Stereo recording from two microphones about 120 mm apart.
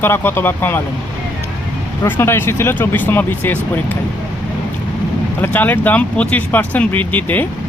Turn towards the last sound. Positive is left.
turn(degrees=15)  # may be behind; listen again after turning